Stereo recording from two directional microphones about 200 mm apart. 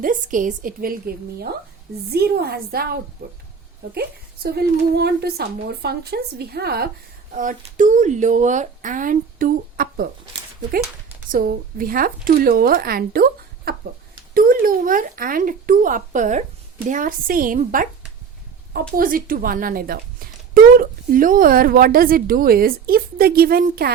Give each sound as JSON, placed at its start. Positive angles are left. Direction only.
{"t": 0.0, "sound": "speech", "side_deg": -40}
{"t": 4.4, "sound": "speech", "side_deg": -50}
{"t": 7.3, "sound": "speech", "side_deg": -40}
{"t": 11.3, "sound": "speech", "side_deg": -45}